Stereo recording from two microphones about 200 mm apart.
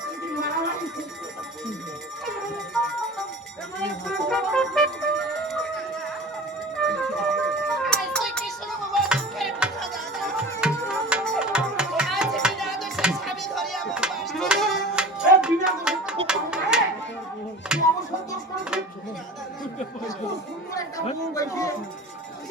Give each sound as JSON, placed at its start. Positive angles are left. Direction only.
{"t": 3.8, "sound": "music", "side_deg": 0}
{"t": 6.8, "sound": "music", "side_deg": 0}
{"t": 21.3, "sound": "music", "side_deg": 15}